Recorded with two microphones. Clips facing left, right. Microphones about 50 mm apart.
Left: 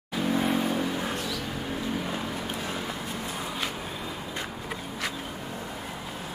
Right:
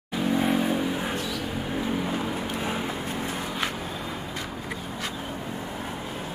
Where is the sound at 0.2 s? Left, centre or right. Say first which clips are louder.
Right 2 dB; centre.